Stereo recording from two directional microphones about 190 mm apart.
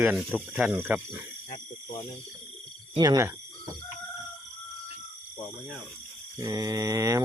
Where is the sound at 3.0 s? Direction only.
20° right (ahead or behind).